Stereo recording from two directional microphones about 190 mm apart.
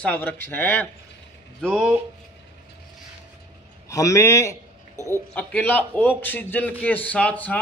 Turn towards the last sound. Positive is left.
turn(degrees=10)  # may be behind; listen again after turning